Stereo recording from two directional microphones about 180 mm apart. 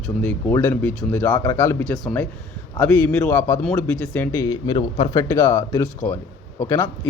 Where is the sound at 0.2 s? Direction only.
10° left (ahead or behind); by 5.2 s 25° left (ahead or behind).